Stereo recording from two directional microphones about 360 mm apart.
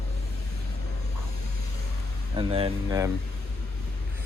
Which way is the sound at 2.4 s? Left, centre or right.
Centre.